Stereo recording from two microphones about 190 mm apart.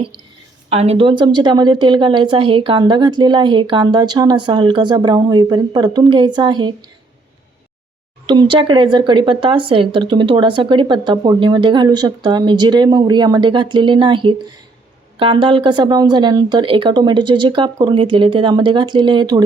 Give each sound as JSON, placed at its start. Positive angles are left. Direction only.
{"t": 0.7, "sound": "speech", "side_deg": -35}
{"t": 8.3, "sound": "speech", "side_deg": -25}